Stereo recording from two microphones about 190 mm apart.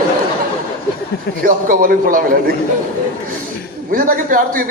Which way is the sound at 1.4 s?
50° right (ahead or behind).